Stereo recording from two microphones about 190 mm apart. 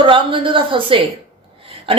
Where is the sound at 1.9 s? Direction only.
30° right (ahead or behind).